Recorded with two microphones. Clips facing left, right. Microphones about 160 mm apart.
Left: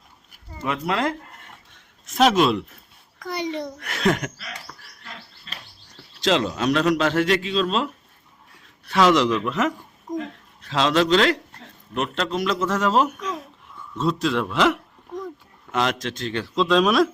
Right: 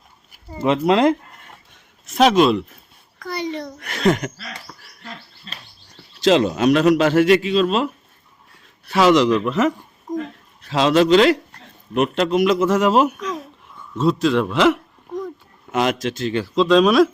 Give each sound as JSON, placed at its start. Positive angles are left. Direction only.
{"t": 0.5, "sound": "speech", "side_deg": -25}
{"t": 2.0, "sound": "a man's voice", "side_deg": 0}
{"t": 3.2, "sound": "a sound", "side_deg": 20}
{"t": 3.8, "sound": "a man's voice", "side_deg": 0}
{"t": 6.2, "sound": "a man's voice", "side_deg": -10}
{"t": 8.9, "sound": "a man's voice", "side_deg": -5}